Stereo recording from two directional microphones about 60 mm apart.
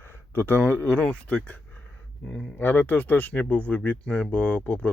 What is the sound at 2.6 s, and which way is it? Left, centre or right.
Speech, left.